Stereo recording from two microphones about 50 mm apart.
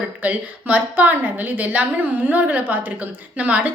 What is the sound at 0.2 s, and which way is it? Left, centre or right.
A woman's voice, right.